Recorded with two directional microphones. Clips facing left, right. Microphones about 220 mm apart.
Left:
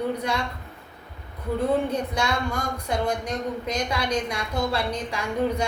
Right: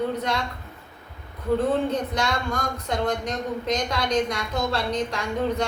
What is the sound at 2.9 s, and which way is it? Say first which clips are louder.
A woman's voice: even; 10° left (ahead or behind).